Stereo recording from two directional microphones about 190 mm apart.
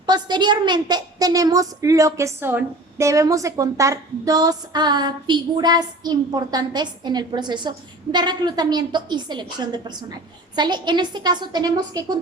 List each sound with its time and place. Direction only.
0.0 s a woman's voice: 20° right (ahead or behind)